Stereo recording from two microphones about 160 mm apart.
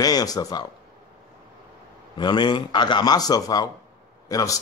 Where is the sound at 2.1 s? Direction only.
30° left (ahead or behind).